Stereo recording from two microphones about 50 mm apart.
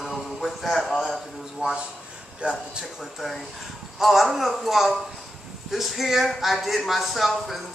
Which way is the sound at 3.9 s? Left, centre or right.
Centre.